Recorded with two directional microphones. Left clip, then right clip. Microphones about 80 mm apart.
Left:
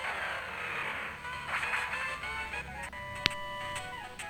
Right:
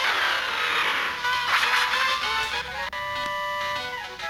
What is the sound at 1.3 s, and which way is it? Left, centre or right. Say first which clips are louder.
Music: right 11 dB; right.